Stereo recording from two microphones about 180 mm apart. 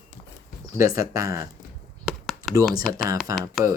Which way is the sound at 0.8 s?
20° right (ahead or behind).